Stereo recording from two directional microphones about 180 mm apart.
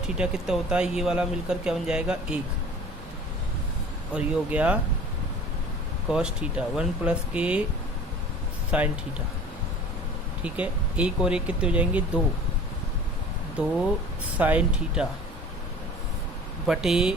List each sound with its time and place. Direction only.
0.2 s speech: 5° right (ahead or behind)
4.1 s speech: 10° right (ahead or behind)
6.1 s speech: 5° right (ahead or behind)
8.7 s speech: 5° right (ahead or behind)
10.4 s speech: 5° right (ahead or behind)
14.3 s speech: 10° right (ahead or behind)
16.6 s speech: 5° right (ahead or behind)